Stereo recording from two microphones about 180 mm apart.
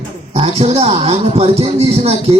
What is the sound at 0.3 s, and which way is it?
A man's voice, 35° right (ahead or behind).